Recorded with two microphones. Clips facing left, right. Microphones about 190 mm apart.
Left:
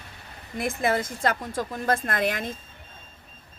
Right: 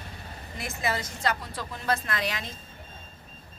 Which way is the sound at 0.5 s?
55° left (ahead or behind).